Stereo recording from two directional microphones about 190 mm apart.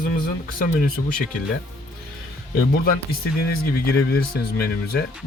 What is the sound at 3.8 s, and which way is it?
Speech, 60° left (ahead or behind).